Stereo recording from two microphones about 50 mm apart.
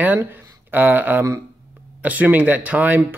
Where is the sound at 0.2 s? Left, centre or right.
Right.